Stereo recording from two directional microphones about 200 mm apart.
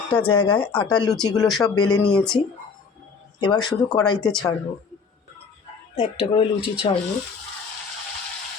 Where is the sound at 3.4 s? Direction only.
20° left (ahead or behind).